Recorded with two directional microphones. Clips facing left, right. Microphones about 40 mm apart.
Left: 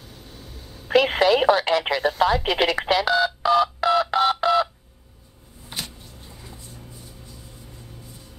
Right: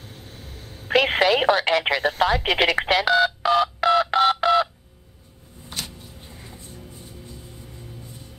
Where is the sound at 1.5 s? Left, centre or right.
Right.